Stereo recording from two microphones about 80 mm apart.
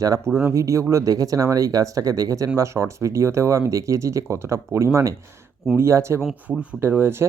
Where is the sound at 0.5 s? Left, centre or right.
Right.